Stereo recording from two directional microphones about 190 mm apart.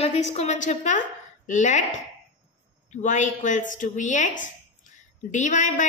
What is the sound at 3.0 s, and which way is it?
A woman's voice, 40° left (ahead or behind).